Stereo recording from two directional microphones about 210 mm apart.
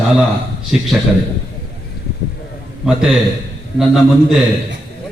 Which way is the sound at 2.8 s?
Centre (ahead or behind).